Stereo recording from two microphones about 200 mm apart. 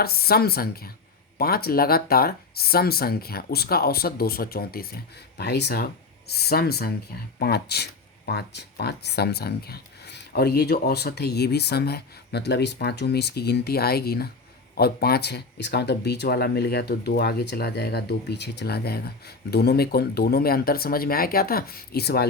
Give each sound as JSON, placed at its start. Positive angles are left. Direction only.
{"t": 0.0, "sound": "speech", "side_deg": 50}